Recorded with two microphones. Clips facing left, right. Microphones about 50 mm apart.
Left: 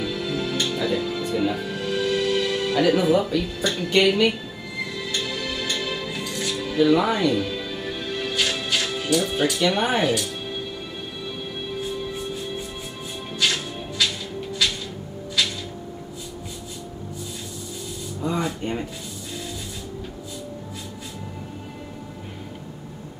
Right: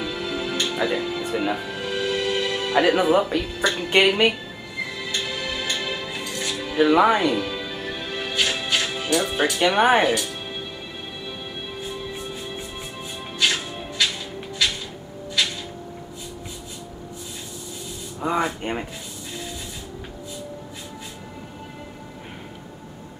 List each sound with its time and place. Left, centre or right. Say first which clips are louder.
0.0 s music: left 1 dB; centre
2.8 s speech: right 1 dB; right
4.8 s music: even; centre
6.8 s speech: right 2 dB; right
7.3 s music: left 1 dB; centre
9.8 s speech: right 4 dB; centre
13.4 s music: right 1 dB; centre
18.2 s speech: right 2 dB; right